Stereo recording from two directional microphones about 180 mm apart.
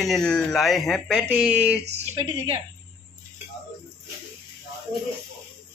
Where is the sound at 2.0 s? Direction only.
30° right (ahead or behind).